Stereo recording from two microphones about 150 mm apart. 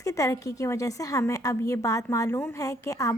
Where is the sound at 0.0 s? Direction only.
20° left (ahead or behind).